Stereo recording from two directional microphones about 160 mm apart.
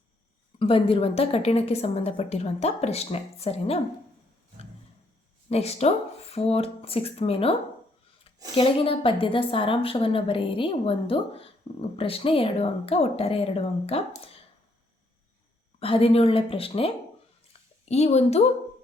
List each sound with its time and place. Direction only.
0.6 s a woman's voice: 35° left (ahead or behind)
5.5 s a woman's voice: 40° left (ahead or behind)
8.5 s a woman's voice: 35° left (ahead or behind)
14.2 s a sound: 35° left (ahead or behind)
15.8 s a woman's voice: 35° left (ahead or behind)